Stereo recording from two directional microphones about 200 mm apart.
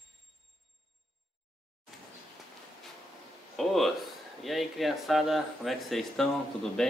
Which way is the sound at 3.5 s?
Centre (ahead or behind).